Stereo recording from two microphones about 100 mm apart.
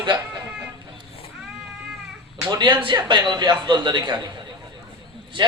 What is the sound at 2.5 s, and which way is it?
A man's voice, 50° right (ahead or behind).